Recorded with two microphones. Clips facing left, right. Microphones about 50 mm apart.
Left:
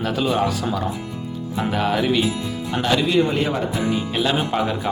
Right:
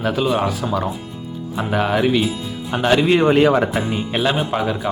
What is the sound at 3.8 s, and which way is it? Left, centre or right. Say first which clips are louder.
Speech: right 1 dB; centre.